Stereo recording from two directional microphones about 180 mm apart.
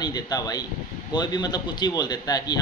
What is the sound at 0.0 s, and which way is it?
Speech, 20° left (ahead or behind).